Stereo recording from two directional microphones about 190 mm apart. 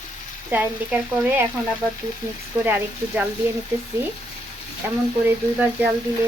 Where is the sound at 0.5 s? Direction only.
10° right (ahead or behind).